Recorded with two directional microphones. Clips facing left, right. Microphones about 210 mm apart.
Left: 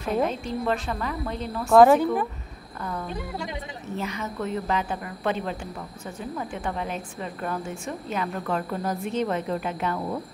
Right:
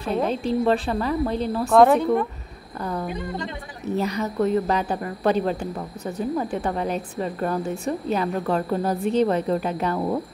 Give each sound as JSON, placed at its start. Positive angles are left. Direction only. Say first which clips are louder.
{"t": 0.0, "sound": "a woman's voice", "louder": "right 2 dB", "side_deg": -30}
{"t": 1.7, "sound": "a woman's voice", "louder": "even", "side_deg": 0}
{"t": 2.8, "sound": "a woman's voice", "louder": "right 5 dB", "side_deg": -35}
{"t": 3.2, "sound": "speech", "louder": "right 3 dB", "side_deg": 10}
{"t": 3.9, "sound": "a woman's voice", "louder": "right 7 dB", "side_deg": -40}